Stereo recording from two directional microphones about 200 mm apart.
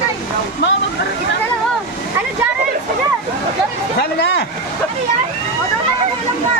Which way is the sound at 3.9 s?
60° left (ahead or behind).